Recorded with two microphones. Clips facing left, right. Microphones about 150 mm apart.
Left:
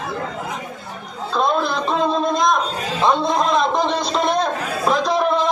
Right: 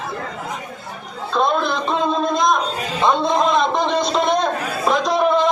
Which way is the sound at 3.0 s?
Centre (ahead or behind).